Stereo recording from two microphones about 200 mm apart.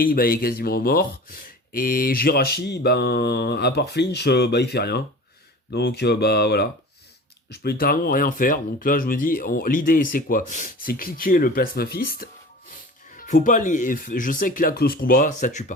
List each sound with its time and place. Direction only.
0.0 s speech: 45° left (ahead or behind)